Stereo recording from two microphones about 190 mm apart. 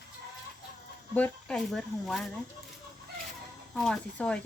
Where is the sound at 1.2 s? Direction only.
5° left (ahead or behind).